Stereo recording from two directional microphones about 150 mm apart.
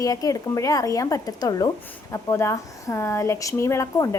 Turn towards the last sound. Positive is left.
turn(degrees=20)  # may be behind; listen again after turning